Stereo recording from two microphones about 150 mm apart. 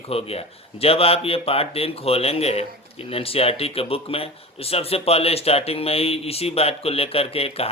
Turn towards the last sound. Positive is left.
turn(degrees=40)  # may be behind; listen again after turning